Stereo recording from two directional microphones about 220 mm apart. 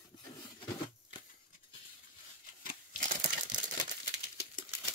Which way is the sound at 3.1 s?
35° right (ahead or behind).